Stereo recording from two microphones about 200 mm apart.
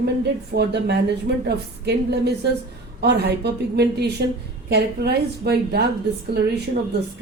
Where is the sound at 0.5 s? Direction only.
55° right (ahead or behind).